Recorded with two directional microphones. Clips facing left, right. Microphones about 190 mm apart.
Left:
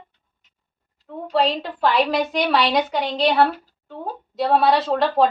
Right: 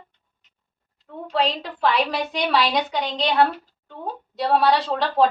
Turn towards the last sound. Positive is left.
turn(degrees=0)  # may be behind; listen again after turning